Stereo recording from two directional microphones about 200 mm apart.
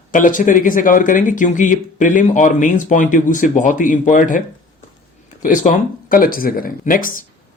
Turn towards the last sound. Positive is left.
turn(degrees=45)  # may be behind; listen again after turning